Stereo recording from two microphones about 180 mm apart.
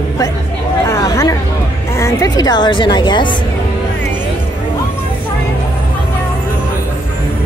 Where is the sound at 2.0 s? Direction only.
15° left (ahead or behind).